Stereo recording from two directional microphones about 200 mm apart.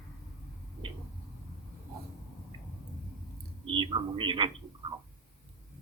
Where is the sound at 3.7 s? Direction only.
25° right (ahead or behind).